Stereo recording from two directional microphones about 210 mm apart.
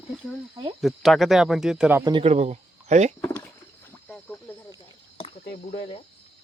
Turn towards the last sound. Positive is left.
turn(degrees=30)  # may be behind; listen again after turning